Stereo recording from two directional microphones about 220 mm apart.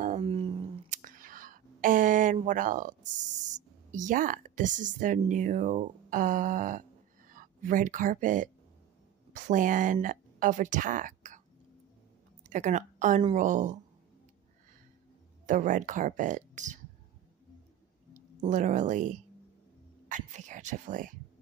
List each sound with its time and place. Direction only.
0.2 s a sound: 25° right (ahead or behind)
1.0 s whispering: 40° right (ahead or behind)
3.5 s a woman's voice: 35° right (ahead or behind)
12.4 s speech: 35° right (ahead or behind)
15.4 s speech: 35° right (ahead or behind)
18.4 s speech: 35° right (ahead or behind)